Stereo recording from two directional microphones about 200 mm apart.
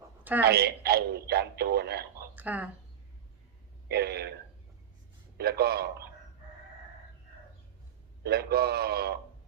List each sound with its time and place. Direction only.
0.4 s speech: 50° right (ahead or behind)
2.2 s a sound: 10° right (ahead or behind)
3.8 s speech: 55° right (ahead or behind)
5.4 s speech: 50° right (ahead or behind)
8.2 s speech: 55° right (ahead or behind)